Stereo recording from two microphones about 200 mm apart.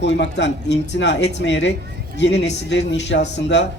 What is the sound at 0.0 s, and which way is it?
A man's voice, 60° left (ahead or behind).